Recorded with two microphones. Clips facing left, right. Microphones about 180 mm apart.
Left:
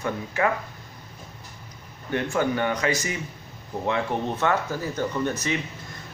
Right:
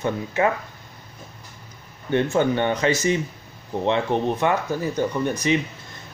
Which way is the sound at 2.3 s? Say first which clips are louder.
Even; 25° right (ahead or behind).